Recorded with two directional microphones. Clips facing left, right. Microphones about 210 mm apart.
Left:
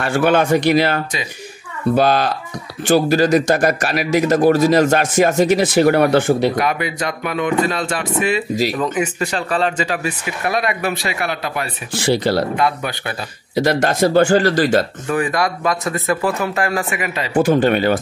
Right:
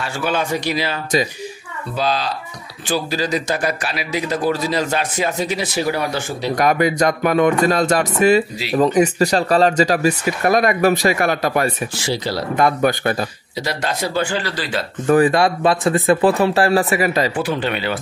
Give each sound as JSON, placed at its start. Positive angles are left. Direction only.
{"t": 0.0, "sound": "a man's voice", "side_deg": 55}
{"t": 6.5, "sound": "speech", "side_deg": -45}
{"t": 12.0, "sound": "speech", "side_deg": 60}
{"t": 12.5, "sound": "speech", "side_deg": -45}
{"t": 13.6, "sound": "a man's voice", "side_deg": 50}
{"t": 15.0, "sound": "speech", "side_deg": -35}
{"t": 17.3, "sound": "a man's voice", "side_deg": 45}